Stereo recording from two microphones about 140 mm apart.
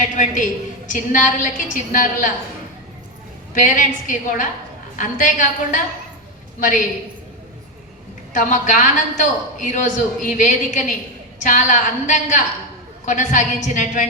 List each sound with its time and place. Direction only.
0.0 s a man's voice: 65° left (ahead or behind)
3.5 s a woman's voice: 65° left (ahead or behind)
8.3 s a man's voice: 65° left (ahead or behind)